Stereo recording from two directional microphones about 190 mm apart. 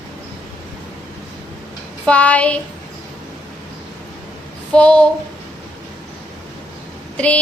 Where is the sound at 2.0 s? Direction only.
5° left (ahead or behind).